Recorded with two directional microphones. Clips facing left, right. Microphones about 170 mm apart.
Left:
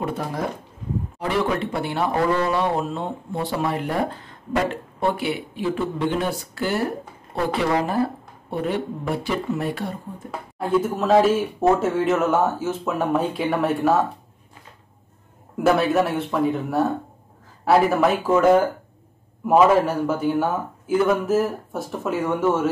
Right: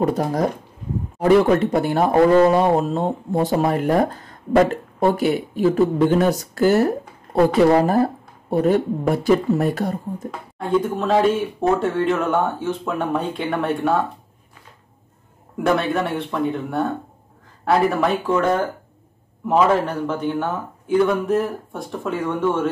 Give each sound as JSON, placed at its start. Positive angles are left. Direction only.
{"t": 0.0, "sound": "speech", "side_deg": -40}
{"t": 10.6, "sound": "speech", "side_deg": 5}
{"t": 15.6, "sound": "speech", "side_deg": 5}